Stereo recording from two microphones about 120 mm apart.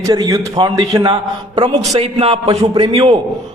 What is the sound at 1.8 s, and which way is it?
Speech, 60° right (ahead or behind).